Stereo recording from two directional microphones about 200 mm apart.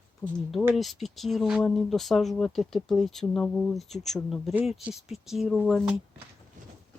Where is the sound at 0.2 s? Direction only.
10° left (ahead or behind).